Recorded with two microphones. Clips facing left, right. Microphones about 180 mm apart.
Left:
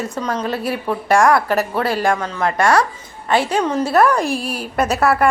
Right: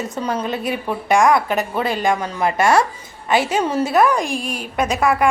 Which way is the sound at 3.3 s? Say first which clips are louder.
Left 1 dB; centre (ahead or behind).